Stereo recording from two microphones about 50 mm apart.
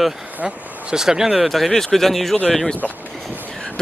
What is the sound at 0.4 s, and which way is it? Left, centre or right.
Speech, right.